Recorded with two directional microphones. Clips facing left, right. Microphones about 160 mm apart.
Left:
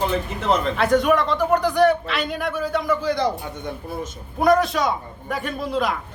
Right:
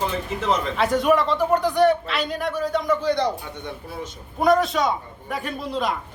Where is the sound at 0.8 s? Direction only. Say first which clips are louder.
Even; centre (ahead or behind).